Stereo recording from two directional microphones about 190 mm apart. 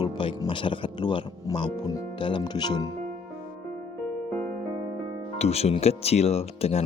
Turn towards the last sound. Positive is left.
turn(degrees=35)  # may be behind; listen again after turning